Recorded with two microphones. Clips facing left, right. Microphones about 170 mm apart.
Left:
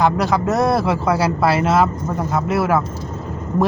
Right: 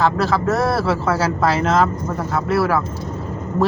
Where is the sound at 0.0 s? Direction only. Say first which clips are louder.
Left 1 dB; 15° left (ahead or behind).